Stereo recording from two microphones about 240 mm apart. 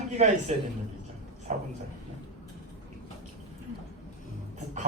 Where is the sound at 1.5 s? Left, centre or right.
Right.